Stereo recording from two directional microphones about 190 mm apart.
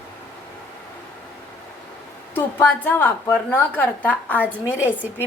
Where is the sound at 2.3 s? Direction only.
10° left (ahead or behind).